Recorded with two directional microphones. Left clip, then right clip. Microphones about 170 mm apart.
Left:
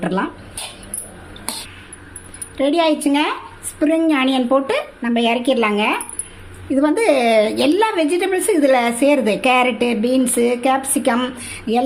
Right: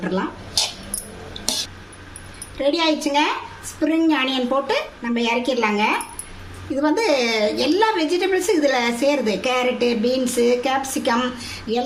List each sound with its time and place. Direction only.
0.0 s speech: 60° left (ahead or behind)
2.6 s a woman's voice: 60° left (ahead or behind)